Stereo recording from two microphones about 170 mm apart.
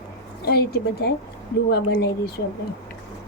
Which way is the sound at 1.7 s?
85° left.